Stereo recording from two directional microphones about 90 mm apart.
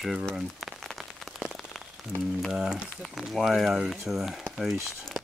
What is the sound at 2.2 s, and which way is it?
Speech, centre (ahead or behind).